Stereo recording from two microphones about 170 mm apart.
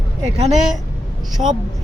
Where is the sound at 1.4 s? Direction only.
35° right (ahead or behind).